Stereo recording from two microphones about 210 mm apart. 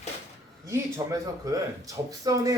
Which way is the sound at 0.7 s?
15° right (ahead or behind).